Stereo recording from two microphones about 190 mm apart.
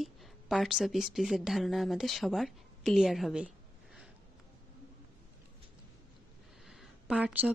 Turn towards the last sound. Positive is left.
turn(degrees=-5)  # may be behind; listen again after turning